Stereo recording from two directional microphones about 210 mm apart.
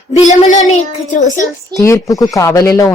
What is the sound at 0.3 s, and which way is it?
Speech, 35° left (ahead or behind).